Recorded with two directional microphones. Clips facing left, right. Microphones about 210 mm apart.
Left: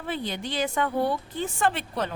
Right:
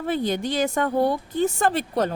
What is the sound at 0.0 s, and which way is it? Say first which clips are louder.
A woman's voice: right 7 dB; 45° right (ahead or behind).